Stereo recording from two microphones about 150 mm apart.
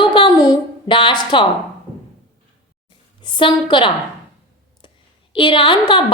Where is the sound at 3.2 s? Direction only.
30° left (ahead or behind).